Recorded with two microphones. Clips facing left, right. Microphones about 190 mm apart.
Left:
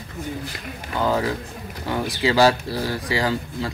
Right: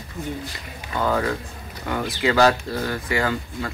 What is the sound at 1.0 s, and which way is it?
Speech, 20° left (ahead or behind).